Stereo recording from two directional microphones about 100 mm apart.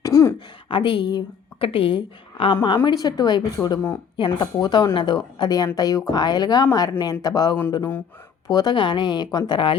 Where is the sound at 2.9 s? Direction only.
40° left (ahead or behind).